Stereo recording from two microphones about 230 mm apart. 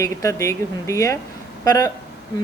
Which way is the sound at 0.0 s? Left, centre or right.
Centre.